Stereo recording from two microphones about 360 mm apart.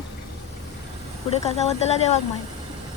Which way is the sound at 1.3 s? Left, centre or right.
Centre.